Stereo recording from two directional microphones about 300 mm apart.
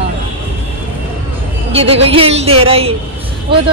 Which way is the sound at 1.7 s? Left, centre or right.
Centre.